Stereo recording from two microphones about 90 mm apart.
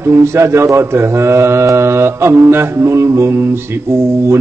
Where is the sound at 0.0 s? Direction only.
30° right (ahead or behind).